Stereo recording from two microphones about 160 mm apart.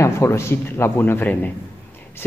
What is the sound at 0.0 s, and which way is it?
Speech, 15° left (ahead or behind).